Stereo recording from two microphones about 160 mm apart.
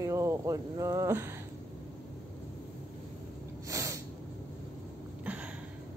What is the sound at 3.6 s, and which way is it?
Snort, 20° right (ahead or behind).